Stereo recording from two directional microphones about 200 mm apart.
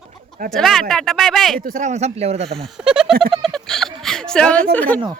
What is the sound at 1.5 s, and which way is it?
Speech, 40° right (ahead or behind).